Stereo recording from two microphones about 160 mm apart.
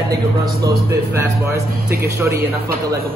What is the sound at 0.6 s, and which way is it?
Speech, 15° right (ahead or behind).